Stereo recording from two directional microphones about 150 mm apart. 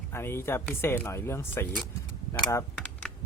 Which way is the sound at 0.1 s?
15° left (ahead or behind).